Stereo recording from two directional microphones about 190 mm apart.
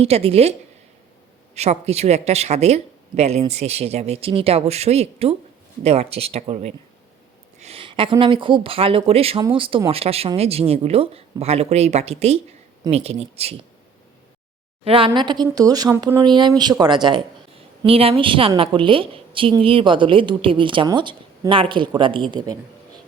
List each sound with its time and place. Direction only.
0.0 s speech: 30° right (ahead or behind)
1.5 s a woman's voice: 35° right (ahead or behind)
14.8 s a woman's voice: 30° right (ahead or behind)